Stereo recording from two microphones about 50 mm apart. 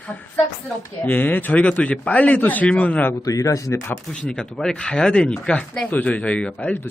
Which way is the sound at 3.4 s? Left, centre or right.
Left.